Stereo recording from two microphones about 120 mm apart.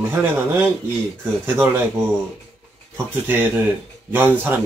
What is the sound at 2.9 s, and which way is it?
Speech, 15° right (ahead or behind).